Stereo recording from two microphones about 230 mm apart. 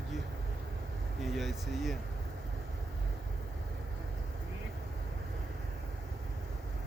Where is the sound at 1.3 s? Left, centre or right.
Centre.